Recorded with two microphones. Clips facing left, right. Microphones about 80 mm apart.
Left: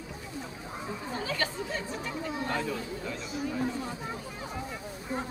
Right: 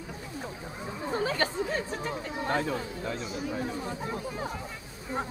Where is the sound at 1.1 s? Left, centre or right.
Right.